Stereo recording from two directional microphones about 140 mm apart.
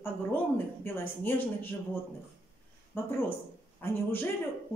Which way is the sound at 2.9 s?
15° left (ahead or behind).